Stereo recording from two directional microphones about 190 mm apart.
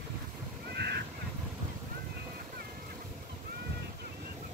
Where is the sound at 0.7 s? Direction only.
60° right (ahead or behind).